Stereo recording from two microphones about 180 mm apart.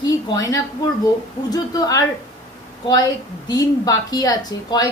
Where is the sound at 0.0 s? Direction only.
20° left (ahead or behind).